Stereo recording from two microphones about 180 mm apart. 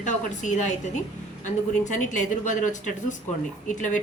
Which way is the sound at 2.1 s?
45° left (ahead or behind).